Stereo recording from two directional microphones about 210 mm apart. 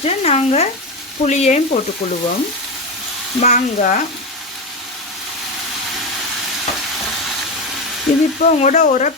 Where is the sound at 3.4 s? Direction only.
35° left (ahead or behind).